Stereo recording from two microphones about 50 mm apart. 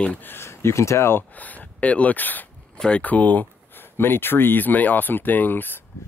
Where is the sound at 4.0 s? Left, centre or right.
Left.